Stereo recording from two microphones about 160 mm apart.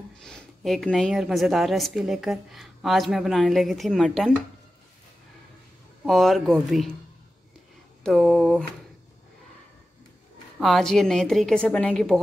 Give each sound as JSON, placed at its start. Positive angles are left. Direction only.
{"t": 0.2, "sound": "a woman's voice", "side_deg": 5}
{"t": 6.0, "sound": "a woman's voice", "side_deg": 0}
{"t": 8.0, "sound": "a woman's voice", "side_deg": 0}
{"t": 10.6, "sound": "a woman's voice", "side_deg": 0}